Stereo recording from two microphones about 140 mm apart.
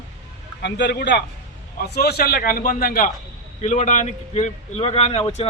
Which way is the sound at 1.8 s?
90° left.